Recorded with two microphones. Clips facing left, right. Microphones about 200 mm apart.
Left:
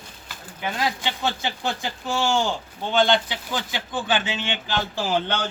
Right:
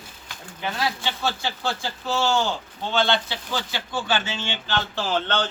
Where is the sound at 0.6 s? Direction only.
15° left (ahead or behind).